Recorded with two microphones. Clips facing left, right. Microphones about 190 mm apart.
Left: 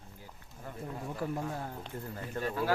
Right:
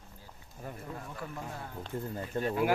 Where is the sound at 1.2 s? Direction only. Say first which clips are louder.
Left 6 dB; 35° left (ahead or behind).